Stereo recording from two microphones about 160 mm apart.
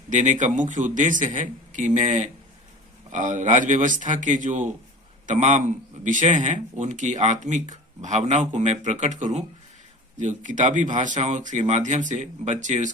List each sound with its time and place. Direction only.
0.1 s a man's voice: 50° right (ahead or behind)